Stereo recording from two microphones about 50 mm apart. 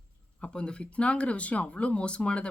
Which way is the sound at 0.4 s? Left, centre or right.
Left.